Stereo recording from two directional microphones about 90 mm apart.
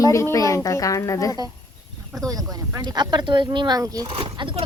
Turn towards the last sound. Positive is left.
turn(degrees=-65)  # may be behind; listen again after turning